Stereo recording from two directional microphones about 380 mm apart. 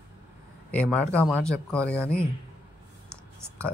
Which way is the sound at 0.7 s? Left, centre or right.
Centre.